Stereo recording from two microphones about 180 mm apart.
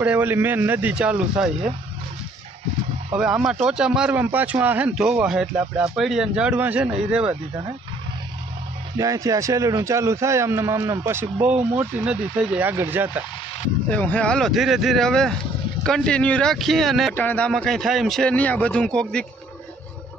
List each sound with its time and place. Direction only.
0.0 s a man's voice: 10° right (ahead or behind)
3.2 s speech: 5° right (ahead or behind)
8.9 s a man's voice: 20° right (ahead or behind)
13.8 s speech: 5° left (ahead or behind)